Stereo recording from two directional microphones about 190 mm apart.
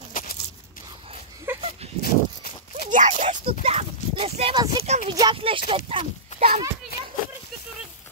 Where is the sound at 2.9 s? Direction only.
40° right (ahead or behind).